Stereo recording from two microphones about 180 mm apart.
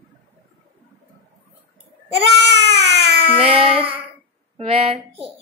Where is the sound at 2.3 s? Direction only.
85° right.